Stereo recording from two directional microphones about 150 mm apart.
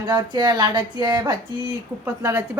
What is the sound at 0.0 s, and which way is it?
Speech, 30° right (ahead or behind).